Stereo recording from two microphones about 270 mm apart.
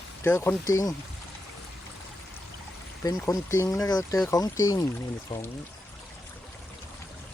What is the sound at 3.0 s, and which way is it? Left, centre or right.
Speech, centre.